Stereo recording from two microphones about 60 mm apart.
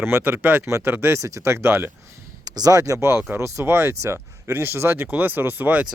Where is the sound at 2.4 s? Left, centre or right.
Right.